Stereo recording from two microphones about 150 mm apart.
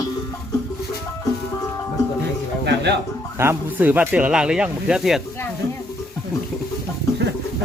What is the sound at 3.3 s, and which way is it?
Speech, 15° right (ahead or behind).